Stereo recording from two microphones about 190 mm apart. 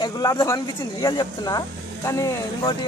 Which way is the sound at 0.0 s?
20° left (ahead or behind).